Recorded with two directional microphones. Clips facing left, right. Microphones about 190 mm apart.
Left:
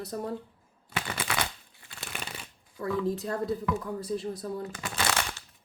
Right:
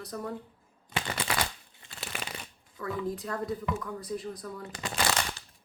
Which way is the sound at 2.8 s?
30° left (ahead or behind).